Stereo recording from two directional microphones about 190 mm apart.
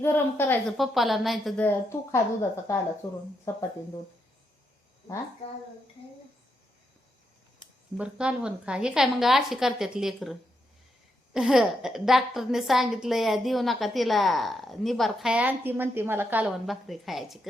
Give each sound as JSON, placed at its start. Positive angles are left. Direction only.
{"t": 0.0, "sound": "a woman's voice", "side_deg": 10}
{"t": 0.8, "sound": "a woman's voice", "side_deg": 0}
{"t": 7.9, "sound": "a woman's voice", "side_deg": -5}
{"t": 11.3, "sound": "a woman's voice", "side_deg": 0}